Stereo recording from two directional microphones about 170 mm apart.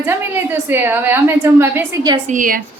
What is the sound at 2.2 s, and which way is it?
Speech, 50° right (ahead or behind).